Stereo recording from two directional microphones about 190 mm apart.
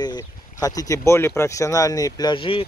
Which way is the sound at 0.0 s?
20° left (ahead or behind).